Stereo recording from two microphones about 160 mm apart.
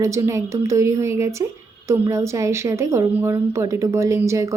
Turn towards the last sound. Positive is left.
turn(degrees=-20)  # may be behind; listen again after turning